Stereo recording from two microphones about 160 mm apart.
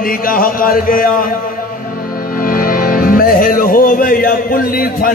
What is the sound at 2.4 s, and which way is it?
Speech, 60° left (ahead or behind).